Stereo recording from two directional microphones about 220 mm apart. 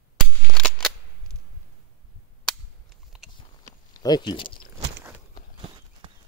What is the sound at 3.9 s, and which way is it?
Speech, 20° left (ahead or behind).